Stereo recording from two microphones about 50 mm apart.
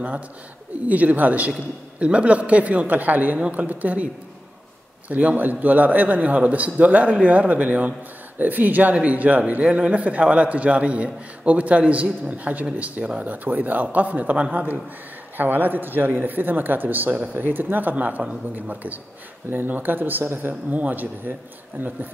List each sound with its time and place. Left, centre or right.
0.8 s a man's voice: right